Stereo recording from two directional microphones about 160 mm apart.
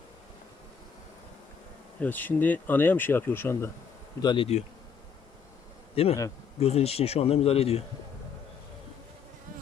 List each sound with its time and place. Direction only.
2.0 s speech: 10° left (ahead or behind)
4.2 s speech: 30° left (ahead or behind)
5.9 s speech: 40° left (ahead or behind)